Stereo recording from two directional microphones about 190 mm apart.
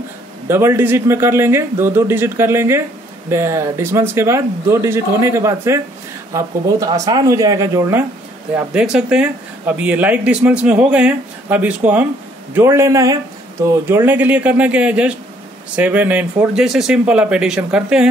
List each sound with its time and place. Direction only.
0.5 s speech: 15° right (ahead or behind)
8.5 s speech: 5° right (ahead or behind)